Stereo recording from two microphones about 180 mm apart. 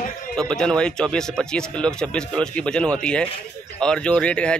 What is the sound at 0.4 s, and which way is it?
A man's voice, 5° left (ahead or behind).